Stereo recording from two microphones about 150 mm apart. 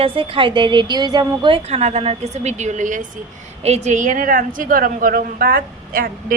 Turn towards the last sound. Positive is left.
turn(degrees=-75)  # may be behind; listen again after turning